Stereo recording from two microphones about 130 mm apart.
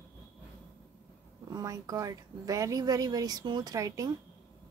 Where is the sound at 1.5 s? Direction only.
25° right (ahead or behind).